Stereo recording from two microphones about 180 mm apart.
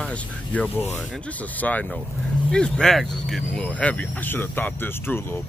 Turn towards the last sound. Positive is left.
turn(degrees=10)  # may be behind; listen again after turning